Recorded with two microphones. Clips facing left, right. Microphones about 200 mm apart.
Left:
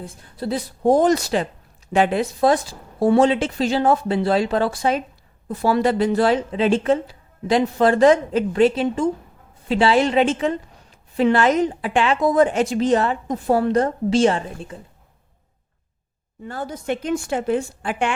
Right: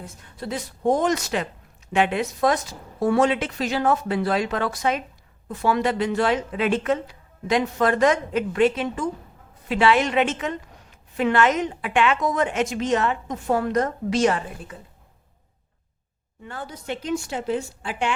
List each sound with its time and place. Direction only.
0.0 s a woman's voice: 30° left (ahead or behind)
16.4 s a woman's voice: 40° left (ahead or behind)